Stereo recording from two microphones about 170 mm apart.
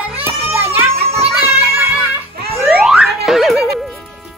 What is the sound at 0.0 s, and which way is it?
Children playing, 10° right (ahead or behind).